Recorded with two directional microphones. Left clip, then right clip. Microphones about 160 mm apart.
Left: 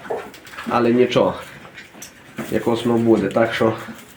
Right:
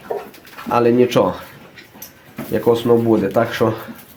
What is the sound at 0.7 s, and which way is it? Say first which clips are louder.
Speech: right 2 dB; 90° right.